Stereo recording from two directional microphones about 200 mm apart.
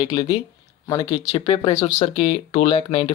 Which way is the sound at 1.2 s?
30° left (ahead or behind).